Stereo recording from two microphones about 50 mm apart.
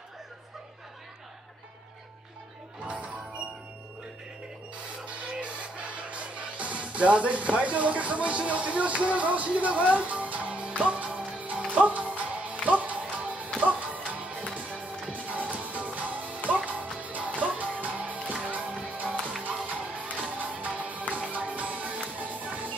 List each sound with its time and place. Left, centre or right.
2.8 s music: right
5.3 s speech: right
9.9 s music: right